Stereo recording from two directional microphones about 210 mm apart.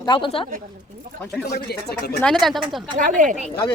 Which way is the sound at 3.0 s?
40° right (ahead or behind).